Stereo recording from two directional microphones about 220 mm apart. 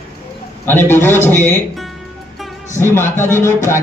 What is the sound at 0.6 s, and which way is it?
A man's voice, 10° left (ahead or behind).